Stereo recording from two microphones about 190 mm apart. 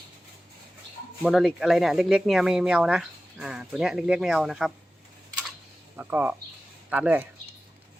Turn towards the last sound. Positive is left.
turn(degrees=-10)  # may be behind; listen again after turning